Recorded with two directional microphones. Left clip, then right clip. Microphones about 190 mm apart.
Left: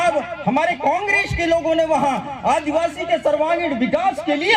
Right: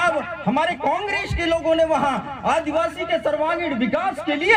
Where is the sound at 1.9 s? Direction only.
35° left (ahead or behind).